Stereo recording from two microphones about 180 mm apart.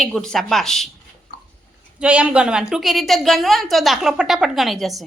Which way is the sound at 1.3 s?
60° left (ahead or behind).